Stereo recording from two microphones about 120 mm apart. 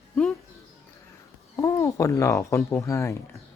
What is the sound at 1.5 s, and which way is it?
Owl, 25° left (ahead or behind).